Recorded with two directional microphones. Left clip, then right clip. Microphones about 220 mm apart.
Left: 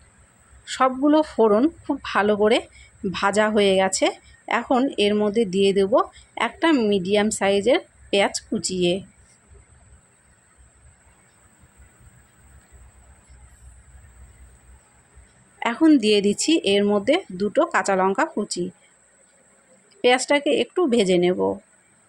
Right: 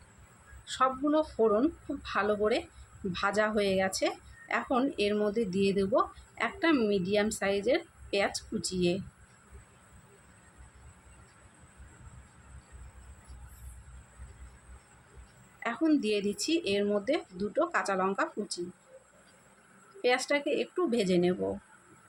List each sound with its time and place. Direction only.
0.6 s a woman's voice: 30° left (ahead or behind)
15.6 s a woman's voice: 35° left (ahead or behind)
20.0 s a woman's voice: 30° left (ahead or behind)